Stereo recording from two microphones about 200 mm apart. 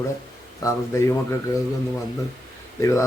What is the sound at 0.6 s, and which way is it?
Speech, 15° left (ahead or behind).